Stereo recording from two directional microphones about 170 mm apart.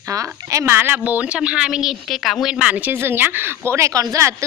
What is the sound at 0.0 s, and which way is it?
A woman's voice, 20° right (ahead or behind).